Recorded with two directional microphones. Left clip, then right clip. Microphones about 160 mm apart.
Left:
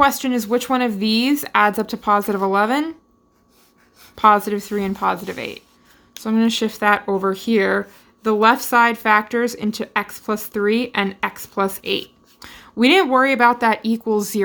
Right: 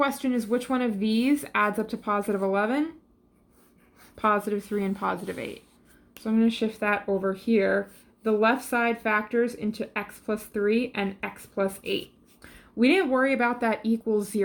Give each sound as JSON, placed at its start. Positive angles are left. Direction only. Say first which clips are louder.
{"t": 0.0, "sound": "speech", "louder": "left 9 dB", "side_deg": 35}
{"t": 4.1, "sound": "speech", "louder": "left 10 dB", "side_deg": 40}
{"t": 6.2, "sound": "speech", "louder": "left 6 dB", "side_deg": 45}